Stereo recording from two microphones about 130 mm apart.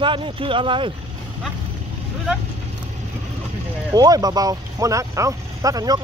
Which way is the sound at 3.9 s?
30° right (ahead or behind).